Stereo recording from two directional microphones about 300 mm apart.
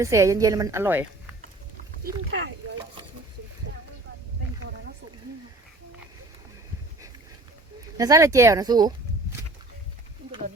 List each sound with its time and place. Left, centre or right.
0.0 s a woman's voice: centre
2.0 s a sound: right
7.9 s a woman's voice: centre